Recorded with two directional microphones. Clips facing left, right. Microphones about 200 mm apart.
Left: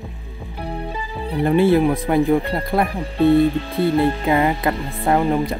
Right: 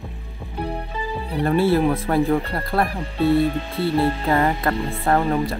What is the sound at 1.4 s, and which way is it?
Speech, 15° left (ahead or behind).